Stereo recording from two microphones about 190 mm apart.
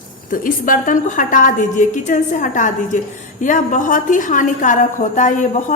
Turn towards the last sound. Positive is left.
turn(degrees=40)  # may be behind; listen again after turning